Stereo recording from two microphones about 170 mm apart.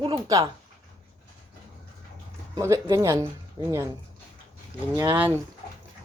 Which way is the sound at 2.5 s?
20° right (ahead or behind).